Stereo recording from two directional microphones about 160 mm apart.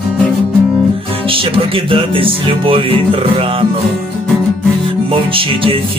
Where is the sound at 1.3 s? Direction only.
35° right (ahead or behind).